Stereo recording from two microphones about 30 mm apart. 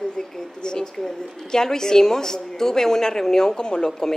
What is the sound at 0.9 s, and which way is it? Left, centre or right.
A woman's voice, centre.